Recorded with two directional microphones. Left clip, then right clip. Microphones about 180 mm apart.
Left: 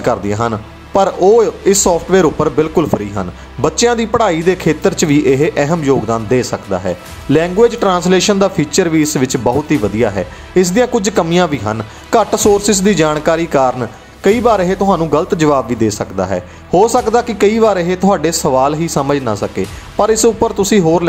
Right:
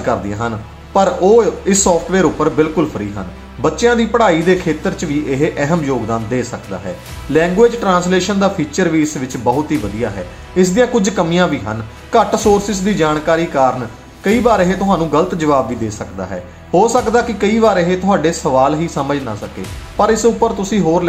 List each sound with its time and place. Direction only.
0.0 s speech: 35° left (ahead or behind)